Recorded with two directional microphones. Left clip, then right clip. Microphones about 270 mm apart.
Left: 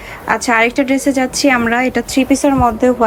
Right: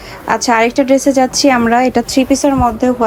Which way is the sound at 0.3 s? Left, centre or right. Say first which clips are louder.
Right 1 dB; centre.